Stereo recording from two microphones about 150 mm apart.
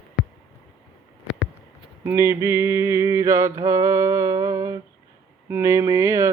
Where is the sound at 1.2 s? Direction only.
10° right (ahead or behind).